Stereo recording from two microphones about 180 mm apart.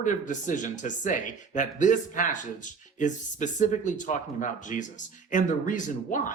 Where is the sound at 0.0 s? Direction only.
45° left (ahead or behind).